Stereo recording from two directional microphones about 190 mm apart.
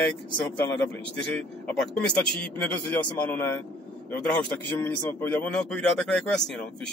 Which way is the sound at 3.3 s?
10° left (ahead or behind).